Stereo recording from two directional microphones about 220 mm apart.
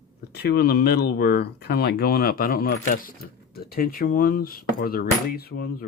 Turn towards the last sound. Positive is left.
turn(degrees=40)  # may be behind; listen again after turning